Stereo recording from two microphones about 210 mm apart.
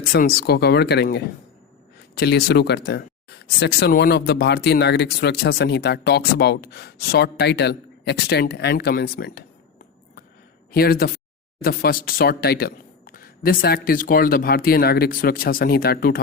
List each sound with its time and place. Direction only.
0.1 s speech: 45° left (ahead or behind)